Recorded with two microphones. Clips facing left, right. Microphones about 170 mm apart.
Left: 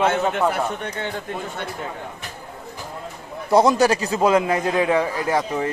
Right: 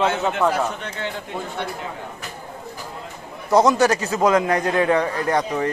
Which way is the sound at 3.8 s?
35° left (ahead or behind).